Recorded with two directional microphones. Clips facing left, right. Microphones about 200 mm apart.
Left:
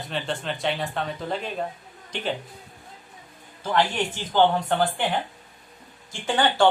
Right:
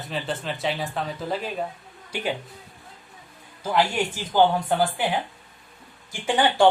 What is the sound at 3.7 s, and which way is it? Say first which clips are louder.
Speech: right 1 dB; 10° right (ahead or behind).